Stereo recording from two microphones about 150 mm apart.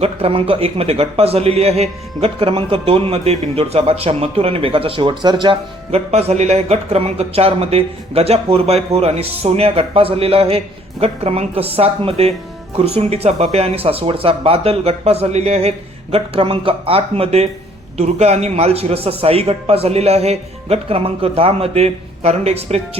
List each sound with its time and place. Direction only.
0.0 s a man's voice: 40° right (ahead or behind)
5.9 s a man's voice: 45° right (ahead or behind)